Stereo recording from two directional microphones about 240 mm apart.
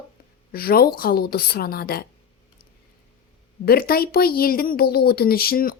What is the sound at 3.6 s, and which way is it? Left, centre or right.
A woman's voice, left.